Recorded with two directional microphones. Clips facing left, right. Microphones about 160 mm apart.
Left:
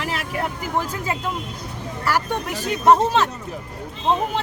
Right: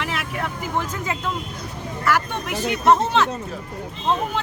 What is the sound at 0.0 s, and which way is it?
Vehicle, 35° left (ahead or behind).